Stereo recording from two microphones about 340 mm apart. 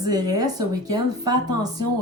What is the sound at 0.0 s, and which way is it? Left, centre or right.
A woman's voice, centre.